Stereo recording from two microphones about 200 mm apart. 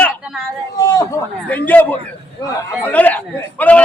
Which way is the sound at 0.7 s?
20° left (ahead or behind).